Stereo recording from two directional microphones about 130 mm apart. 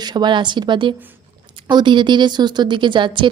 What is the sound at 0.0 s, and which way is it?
A woman's voice, 35° right (ahead or behind).